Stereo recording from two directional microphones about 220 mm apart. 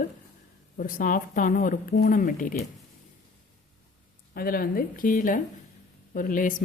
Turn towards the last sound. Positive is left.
turn(degrees=35)  # may be behind; listen again after turning